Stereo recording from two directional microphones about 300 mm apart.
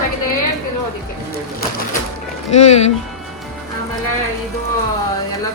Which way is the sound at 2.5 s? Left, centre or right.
Left.